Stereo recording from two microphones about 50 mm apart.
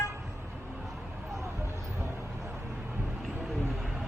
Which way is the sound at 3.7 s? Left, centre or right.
Centre.